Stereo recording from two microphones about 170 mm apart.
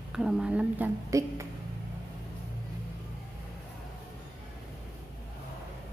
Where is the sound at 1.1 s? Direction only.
20° right (ahead or behind).